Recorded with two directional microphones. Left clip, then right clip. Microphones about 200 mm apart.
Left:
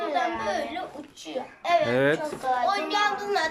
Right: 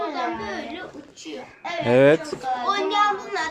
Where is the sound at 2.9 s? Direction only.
50° left (ahead or behind).